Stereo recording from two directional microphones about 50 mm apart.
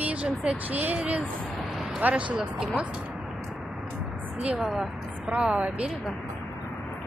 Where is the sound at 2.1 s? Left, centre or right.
Centre.